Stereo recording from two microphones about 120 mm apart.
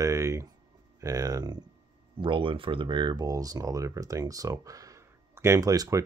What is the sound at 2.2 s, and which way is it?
Speech, 45° right (ahead or behind).